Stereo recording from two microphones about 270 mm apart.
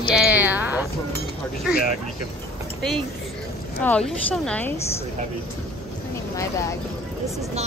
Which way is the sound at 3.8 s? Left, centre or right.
Centre.